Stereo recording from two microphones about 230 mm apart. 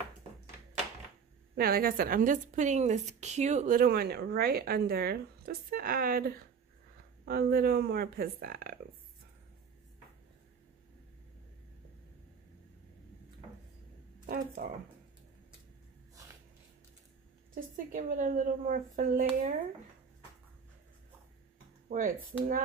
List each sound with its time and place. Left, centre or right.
1.5 s a woman's voice: right
14.2 s speech: right
17.6 s a woman's voice: right
21.8 s speech: right